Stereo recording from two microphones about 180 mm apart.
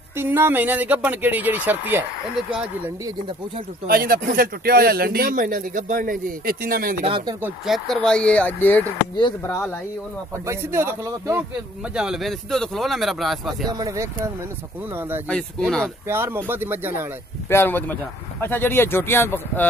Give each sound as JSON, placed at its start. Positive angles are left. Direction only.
{"t": 0.2, "sound": "speech", "side_deg": -10}
{"t": 3.8, "sound": "speech", "side_deg": -55}
{"t": 7.1, "sound": "speech", "side_deg": -30}
{"t": 7.4, "sound": "speech", "side_deg": 0}
{"t": 9.1, "sound": "speech", "side_deg": 25}
{"t": 10.4, "sound": "speech", "side_deg": -15}
{"t": 11.9, "sound": "speech", "side_deg": -5}
{"t": 13.7, "sound": "speech", "side_deg": -20}
{"t": 15.2, "sound": "speech", "side_deg": 5}
{"t": 16.1, "sound": "speech", "side_deg": -10}
{"t": 17.5, "sound": "speech", "side_deg": 10}